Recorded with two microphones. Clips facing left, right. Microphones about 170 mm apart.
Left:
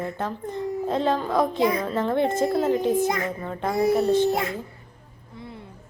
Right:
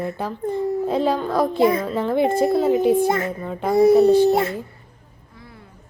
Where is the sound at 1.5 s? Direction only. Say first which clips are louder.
Right 5 dB; 25° right (ahead or behind).